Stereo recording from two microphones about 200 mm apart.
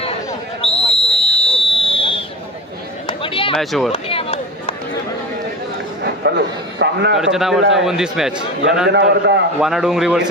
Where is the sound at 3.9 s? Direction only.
30° left (ahead or behind).